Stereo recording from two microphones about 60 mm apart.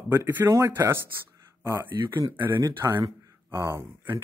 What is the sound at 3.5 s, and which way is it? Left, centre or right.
Speech, right.